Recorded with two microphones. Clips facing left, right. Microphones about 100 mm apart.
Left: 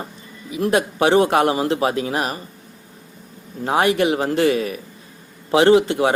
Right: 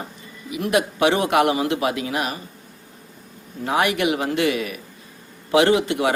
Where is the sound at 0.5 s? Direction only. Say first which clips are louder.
Left 2 dB; 30° left (ahead or behind).